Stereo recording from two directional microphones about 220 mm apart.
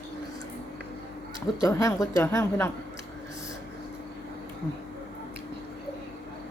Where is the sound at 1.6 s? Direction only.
15° left (ahead or behind).